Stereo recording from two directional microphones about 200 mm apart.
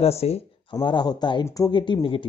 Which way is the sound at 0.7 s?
20° left (ahead or behind).